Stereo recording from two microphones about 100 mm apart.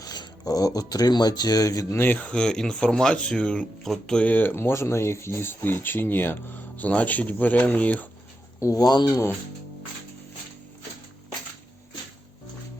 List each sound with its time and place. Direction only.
0.0 s speech: 40° left (ahead or behind)
2.0 s speech: 15° left (ahead or behind)
8.6 s speech: 40° left (ahead or behind)